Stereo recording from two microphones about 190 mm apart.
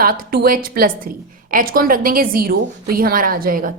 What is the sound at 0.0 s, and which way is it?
A woman's voice, 50° right (ahead or behind).